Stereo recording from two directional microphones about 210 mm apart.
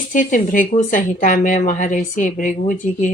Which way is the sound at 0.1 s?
40° left (ahead or behind).